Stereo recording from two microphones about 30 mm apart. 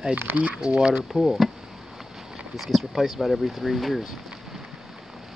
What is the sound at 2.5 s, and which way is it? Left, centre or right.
Speech, centre.